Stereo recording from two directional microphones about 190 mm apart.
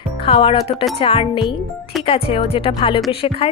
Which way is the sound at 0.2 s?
30° left (ahead or behind).